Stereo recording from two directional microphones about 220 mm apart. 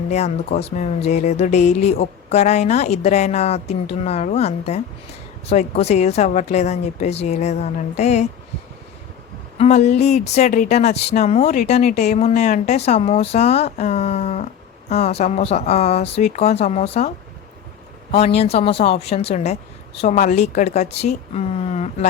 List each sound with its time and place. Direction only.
0.1 s speech: 30° left (ahead or behind)
9.6 s speech: 30° left (ahead or behind)
18.1 s speech: 25° left (ahead or behind)